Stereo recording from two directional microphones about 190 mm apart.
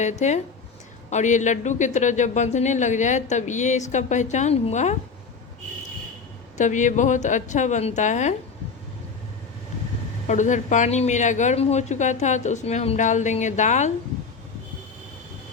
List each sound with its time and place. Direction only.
0.0 s speech: 40° left (ahead or behind)
6.6 s speech: 40° left (ahead or behind)
10.2 s speech: 40° left (ahead or behind)